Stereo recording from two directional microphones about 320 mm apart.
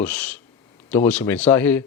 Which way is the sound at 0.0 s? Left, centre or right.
Centre.